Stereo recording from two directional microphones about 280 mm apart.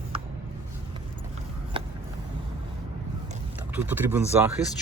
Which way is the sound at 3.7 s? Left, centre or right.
Centre.